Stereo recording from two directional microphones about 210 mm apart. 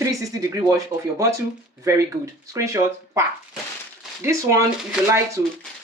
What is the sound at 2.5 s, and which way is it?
Speech, 15° right (ahead or behind).